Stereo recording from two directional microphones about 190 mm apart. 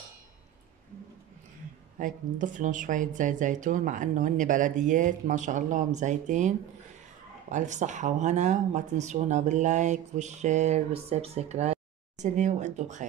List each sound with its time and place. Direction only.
2.0 s speech: 45° right (ahead or behind)
7.5 s speech: 40° right (ahead or behind)